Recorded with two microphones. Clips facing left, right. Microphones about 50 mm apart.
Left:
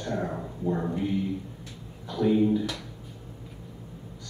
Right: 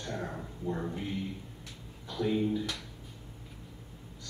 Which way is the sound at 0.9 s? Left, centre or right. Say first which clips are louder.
Left 8 dB; centre.